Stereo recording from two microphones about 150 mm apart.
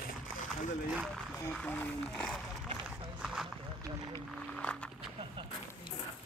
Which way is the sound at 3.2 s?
5° right (ahead or behind).